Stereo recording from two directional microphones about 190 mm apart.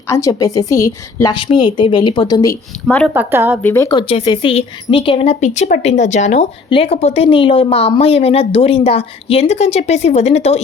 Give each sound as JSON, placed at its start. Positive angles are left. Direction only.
{"t": 0.1, "sound": "a woman's voice", "side_deg": 15}
{"t": 2.8, "sound": "speech", "side_deg": 5}
{"t": 3.2, "sound": "speech", "side_deg": -10}
{"t": 3.6, "sound": "speech", "side_deg": 10}